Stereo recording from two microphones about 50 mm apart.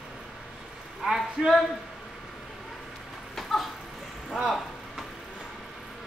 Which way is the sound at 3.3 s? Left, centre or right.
Centre.